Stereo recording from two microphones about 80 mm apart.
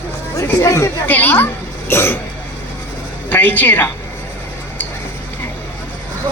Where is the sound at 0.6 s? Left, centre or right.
Left.